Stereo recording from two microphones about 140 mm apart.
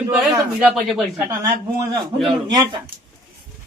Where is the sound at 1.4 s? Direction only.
25° right (ahead or behind).